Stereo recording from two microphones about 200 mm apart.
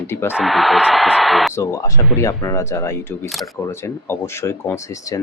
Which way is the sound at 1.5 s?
15° left (ahead or behind).